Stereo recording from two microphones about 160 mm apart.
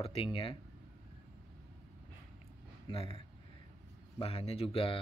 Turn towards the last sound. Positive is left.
turn(degrees=35)  # may be behind; listen again after turning